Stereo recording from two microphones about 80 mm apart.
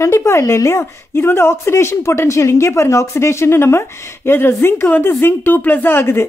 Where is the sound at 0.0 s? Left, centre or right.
Left.